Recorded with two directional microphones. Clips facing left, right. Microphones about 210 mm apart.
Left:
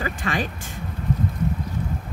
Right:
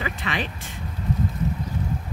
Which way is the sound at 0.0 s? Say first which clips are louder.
Left 2 dB; 45° left (ahead or behind).